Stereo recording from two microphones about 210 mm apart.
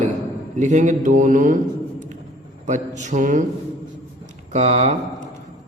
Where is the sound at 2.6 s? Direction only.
35° right (ahead or behind).